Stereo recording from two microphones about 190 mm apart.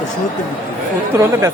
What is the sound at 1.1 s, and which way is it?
Speech, 15° right (ahead or behind).